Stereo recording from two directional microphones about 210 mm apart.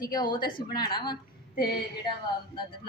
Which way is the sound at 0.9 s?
20° left (ahead or behind).